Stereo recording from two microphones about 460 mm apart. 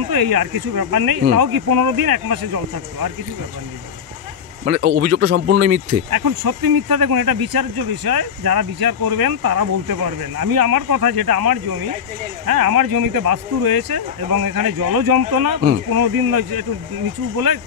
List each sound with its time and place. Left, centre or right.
0.1 s speech: right
4.7 s a man's voice: right
6.0 s speech: right